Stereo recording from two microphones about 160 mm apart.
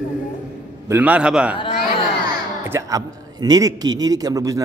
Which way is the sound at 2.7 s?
20° right (ahead or behind).